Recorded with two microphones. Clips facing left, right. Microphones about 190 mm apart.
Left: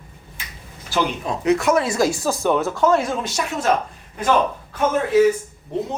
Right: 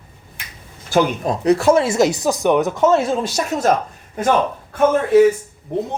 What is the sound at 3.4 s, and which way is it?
Speech, 40° right (ahead or behind).